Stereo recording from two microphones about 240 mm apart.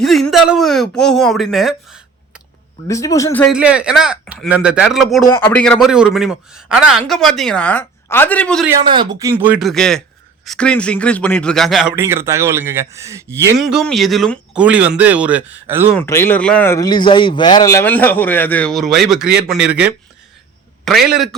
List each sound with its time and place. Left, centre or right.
0.0 s speech: centre
2.8 s speech: centre
3.4 s a man's voice: centre
8.8 s a man's voice: centre
13.6 s a man's voice: centre
16.0 s a man's voice: centre